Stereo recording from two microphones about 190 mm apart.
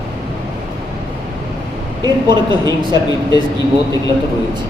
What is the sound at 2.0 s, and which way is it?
Speech, 20° right (ahead or behind).